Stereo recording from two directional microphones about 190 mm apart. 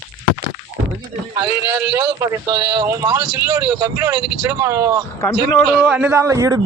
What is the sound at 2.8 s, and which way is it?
Speech, 15° right (ahead or behind).